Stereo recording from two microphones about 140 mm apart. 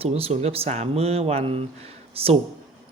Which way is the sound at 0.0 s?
45° right (ahead or behind).